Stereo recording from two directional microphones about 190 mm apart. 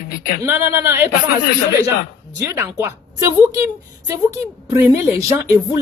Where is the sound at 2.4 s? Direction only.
15° right (ahead or behind).